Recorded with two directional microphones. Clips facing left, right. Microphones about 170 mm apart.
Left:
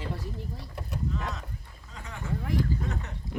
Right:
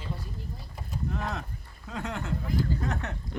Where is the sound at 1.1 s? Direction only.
60° right (ahead or behind).